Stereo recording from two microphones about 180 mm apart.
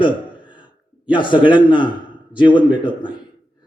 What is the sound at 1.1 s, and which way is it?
A man's voice, 25° left (ahead or behind).